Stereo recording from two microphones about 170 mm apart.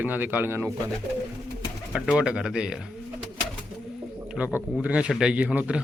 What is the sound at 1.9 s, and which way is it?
Speech, 5° right (ahead or behind).